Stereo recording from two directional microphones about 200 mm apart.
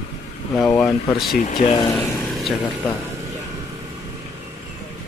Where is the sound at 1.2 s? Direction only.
45° left (ahead or behind).